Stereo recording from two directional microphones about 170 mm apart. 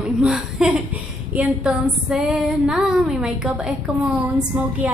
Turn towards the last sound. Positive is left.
turn(degrees=-10)  # may be behind; listen again after turning